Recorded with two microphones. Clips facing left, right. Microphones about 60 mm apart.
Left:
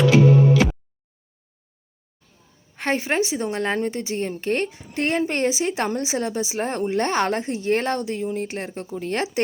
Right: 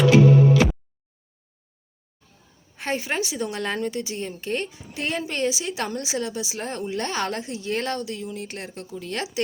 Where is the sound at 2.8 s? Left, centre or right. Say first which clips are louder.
Left 4 dB; left.